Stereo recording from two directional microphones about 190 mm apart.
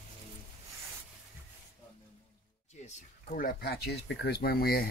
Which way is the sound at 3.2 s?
50° left (ahead or behind).